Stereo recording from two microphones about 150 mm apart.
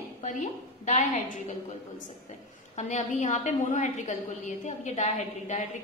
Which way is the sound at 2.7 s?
50° left (ahead or behind).